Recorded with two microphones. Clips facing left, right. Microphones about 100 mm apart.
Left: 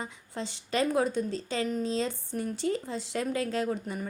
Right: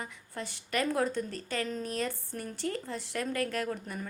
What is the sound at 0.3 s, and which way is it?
Speech, 25° left (ahead or behind).